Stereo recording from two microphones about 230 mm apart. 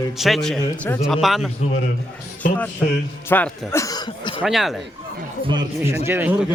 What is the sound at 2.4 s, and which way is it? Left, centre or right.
Speech, left.